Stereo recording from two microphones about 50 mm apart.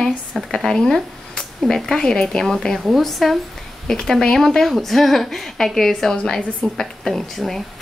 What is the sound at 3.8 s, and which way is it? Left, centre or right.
A woman's voice, centre.